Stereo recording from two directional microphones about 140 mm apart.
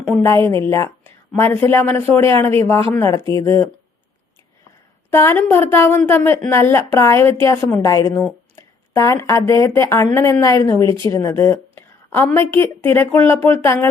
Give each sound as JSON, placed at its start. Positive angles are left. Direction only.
{"t": 0.2, "sound": "a woman's voice", "side_deg": 20}
{"t": 5.1, "sound": "a woman's voice", "side_deg": 20}